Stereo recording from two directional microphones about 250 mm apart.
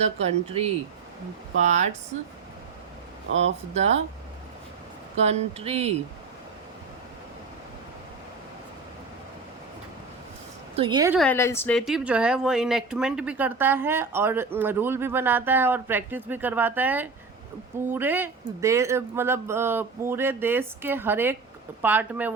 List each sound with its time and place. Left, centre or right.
0.0 s speech: right
3.3 s speech: right
5.1 s speech: right
10.8 s speech: centre
11.1 s speech: centre